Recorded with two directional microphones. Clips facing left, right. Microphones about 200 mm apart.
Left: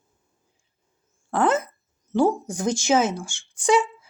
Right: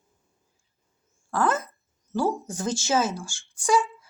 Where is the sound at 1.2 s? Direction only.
25° left (ahead or behind).